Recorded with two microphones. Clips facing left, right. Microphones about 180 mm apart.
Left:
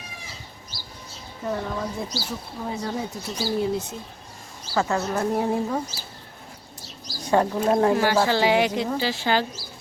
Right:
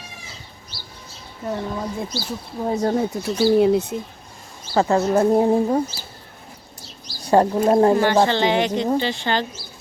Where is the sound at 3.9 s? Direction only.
65° right (ahead or behind).